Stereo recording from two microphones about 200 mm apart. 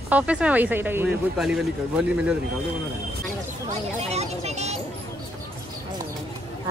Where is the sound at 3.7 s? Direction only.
35° right (ahead or behind).